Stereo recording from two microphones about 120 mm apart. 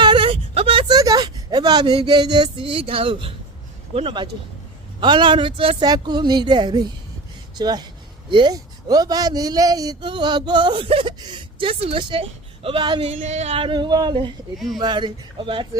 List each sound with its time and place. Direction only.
0.0 s a sound: 45° right (ahead or behind)
0.9 s a sound: 35° right (ahead or behind)
2.0 s speech: 35° right (ahead or behind)
4.9 s speech: 40° right (ahead or behind)
5.8 s a woman's voice: 35° right (ahead or behind)
13.0 s speech: 70° right (ahead or behind); by 15.6 s 45° right (ahead or behind)